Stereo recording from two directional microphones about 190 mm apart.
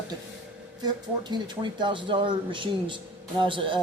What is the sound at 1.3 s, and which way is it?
Speech, 25° right (ahead or behind).